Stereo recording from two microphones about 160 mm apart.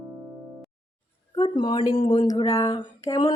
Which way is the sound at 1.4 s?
30° left (ahead or behind).